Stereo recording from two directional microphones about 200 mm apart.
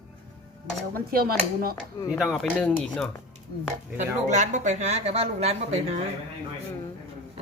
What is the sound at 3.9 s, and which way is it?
A woman's voice, 40° right (ahead or behind).